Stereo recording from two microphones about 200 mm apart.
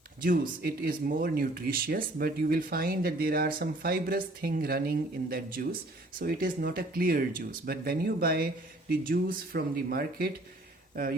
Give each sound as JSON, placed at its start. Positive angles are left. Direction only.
{"t": 0.2, "sound": "speech", "side_deg": -45}